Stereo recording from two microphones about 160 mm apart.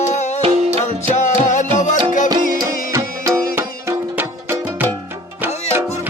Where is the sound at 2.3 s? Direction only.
25° right (ahead or behind).